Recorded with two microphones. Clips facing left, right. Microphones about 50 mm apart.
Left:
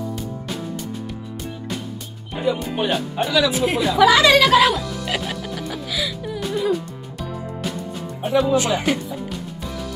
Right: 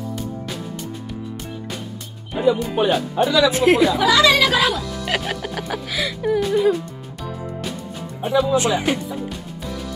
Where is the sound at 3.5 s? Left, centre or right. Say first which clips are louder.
Right 5 dB; right.